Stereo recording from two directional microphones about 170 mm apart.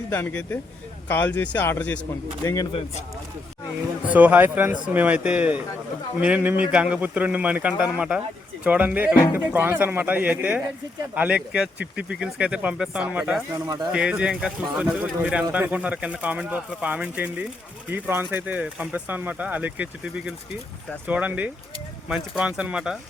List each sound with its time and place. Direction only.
0.1 s speech: 10° left (ahead or behind)
4.0 s speech: 10° right (ahead or behind)